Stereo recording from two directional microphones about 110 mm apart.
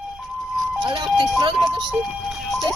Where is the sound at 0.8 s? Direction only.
45° right (ahead or behind).